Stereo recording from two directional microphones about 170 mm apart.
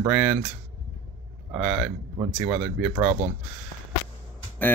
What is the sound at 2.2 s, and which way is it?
Speech, 30° right (ahead or behind).